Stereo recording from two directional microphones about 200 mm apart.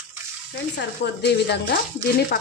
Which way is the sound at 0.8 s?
55° left (ahead or behind).